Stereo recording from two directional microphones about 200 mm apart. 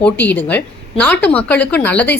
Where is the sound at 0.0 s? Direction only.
10° left (ahead or behind).